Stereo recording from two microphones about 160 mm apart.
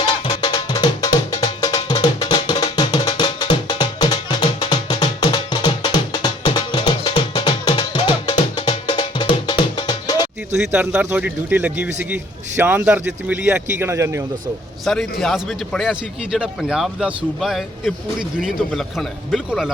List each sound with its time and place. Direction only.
0.0 s music: 30° left (ahead or behind)
10.6 s a man's voice: 10° right (ahead or behind)
14.9 s a man's voice: 5° left (ahead or behind)